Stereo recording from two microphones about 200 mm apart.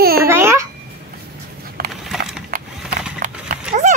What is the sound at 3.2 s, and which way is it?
Horse, 40° right (ahead or behind).